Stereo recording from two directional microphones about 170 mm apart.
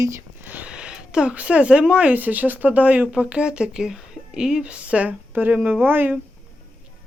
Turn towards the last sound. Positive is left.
turn(degrees=-10)  # may be behind; listen again after turning